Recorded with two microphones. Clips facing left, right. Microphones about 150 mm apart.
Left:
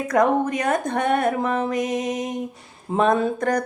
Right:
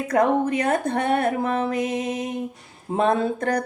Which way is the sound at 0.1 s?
30° right (ahead or behind).